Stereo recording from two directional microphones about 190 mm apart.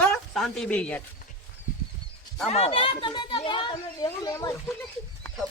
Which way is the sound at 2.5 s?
30° left (ahead or behind).